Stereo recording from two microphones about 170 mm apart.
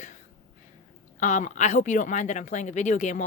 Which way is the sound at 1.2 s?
45° left (ahead or behind).